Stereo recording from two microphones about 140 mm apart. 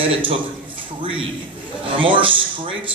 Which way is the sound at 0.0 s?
40° right (ahead or behind).